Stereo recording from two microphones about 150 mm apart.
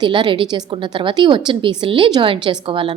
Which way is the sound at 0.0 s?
30° right (ahead or behind).